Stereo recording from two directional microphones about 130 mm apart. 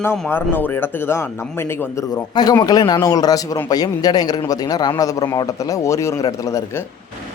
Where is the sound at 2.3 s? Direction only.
30° left (ahead or behind).